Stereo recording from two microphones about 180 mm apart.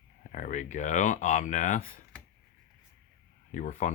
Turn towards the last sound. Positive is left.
turn(degrees=45)  # may be behind; listen again after turning